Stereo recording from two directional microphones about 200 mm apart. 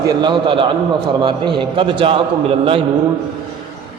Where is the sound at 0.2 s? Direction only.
25° right (ahead or behind).